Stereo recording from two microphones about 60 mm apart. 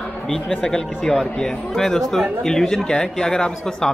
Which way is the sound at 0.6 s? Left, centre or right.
Centre.